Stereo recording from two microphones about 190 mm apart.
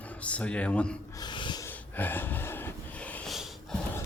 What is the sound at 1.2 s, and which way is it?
Gasp, 25° left (ahead or behind).